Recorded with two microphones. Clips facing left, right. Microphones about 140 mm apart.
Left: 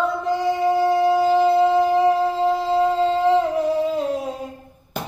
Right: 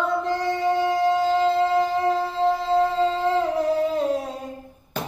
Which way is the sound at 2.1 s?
5° left (ahead or behind).